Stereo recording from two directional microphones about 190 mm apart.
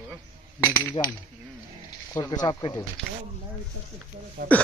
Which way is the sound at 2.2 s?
20° left (ahead or behind).